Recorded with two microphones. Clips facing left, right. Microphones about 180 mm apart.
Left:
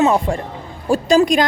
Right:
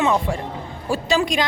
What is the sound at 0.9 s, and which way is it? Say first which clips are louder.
Music: left 7 dB; 45° left (ahead or behind).